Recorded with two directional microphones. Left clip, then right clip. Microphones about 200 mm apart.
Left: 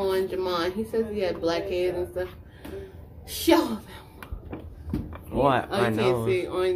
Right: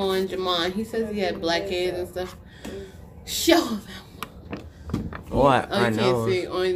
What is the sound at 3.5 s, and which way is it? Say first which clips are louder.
Speech: right 1 dB; centre (ahead or behind).